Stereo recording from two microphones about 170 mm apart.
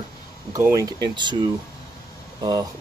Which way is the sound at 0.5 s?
20° right (ahead or behind).